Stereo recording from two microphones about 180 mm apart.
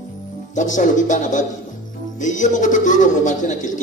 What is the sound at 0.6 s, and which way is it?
A man's voice, 45° left (ahead or behind).